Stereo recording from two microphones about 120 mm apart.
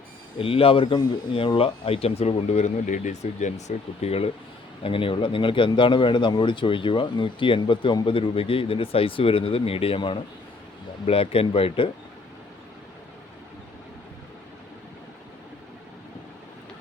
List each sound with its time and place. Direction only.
0.3 s speech: 50° left (ahead or behind)
4.8 s speech: 45° left (ahead or behind)